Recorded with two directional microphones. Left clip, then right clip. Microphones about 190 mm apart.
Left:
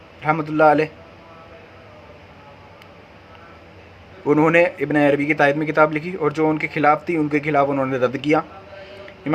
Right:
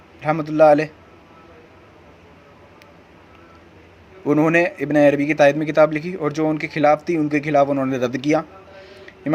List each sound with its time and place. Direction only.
0.2 s a man's voice: 35° right (ahead or behind)
4.2 s a man's voice: 30° right (ahead or behind)